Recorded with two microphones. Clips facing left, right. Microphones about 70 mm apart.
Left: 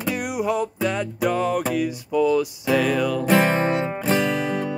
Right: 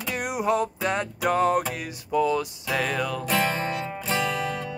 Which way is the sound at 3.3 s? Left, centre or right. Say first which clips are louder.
Left 7 dB; left.